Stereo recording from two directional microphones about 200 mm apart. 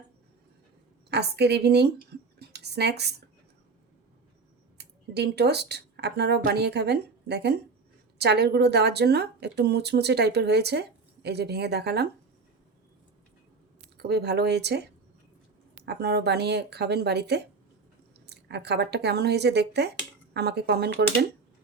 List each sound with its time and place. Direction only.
1.1 s speech: 55° right (ahead or behind)
2.4 s a sound: 55° right (ahead or behind)
4.8 s speech: 55° right (ahead or behind)
14.0 s speech: 55° right (ahead or behind)
15.9 s speech: 55° right (ahead or behind)